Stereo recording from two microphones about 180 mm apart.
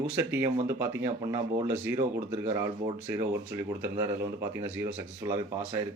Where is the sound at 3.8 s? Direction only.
15° right (ahead or behind).